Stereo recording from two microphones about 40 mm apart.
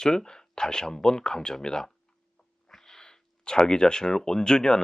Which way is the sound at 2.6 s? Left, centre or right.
Centre.